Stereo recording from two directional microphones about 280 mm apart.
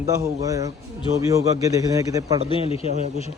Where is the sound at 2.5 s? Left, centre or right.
Centre.